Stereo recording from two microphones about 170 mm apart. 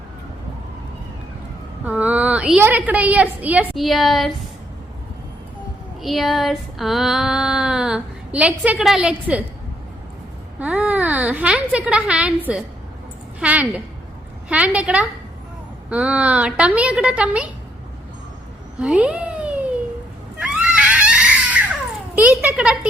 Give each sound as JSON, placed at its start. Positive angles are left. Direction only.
{"t": 1.8, "sound": "a woman's voice", "side_deg": -10}
{"t": 6.0, "sound": "child singing", "side_deg": 0}
{"t": 10.6, "sound": "a woman's voice", "side_deg": -10}
{"t": 18.8, "sound": "cat", "side_deg": -5}
{"t": 20.4, "sound": "screaming", "side_deg": -5}
{"t": 22.1, "sound": "a sound", "side_deg": -10}